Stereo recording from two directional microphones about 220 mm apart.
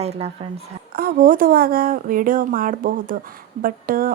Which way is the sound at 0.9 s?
40° right (ahead or behind).